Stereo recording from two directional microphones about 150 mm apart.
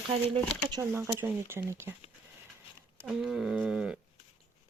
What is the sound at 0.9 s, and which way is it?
Speech, 15° right (ahead or behind).